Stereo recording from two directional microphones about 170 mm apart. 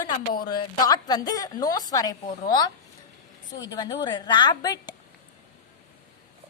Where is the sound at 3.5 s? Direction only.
25° left (ahead or behind).